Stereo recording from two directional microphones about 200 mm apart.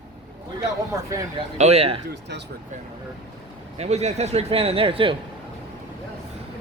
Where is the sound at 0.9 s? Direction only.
15° right (ahead or behind).